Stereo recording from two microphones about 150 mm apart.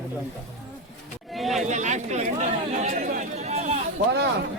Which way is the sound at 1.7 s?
50° right (ahead or behind).